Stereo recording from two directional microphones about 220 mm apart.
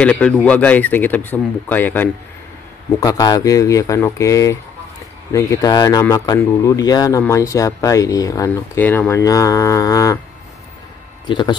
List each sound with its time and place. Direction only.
0.0 s speech: 5° left (ahead or behind)
11.2 s speech: 20° left (ahead or behind)